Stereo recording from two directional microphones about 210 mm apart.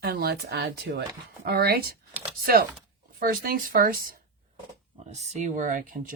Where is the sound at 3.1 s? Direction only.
45° right (ahead or behind).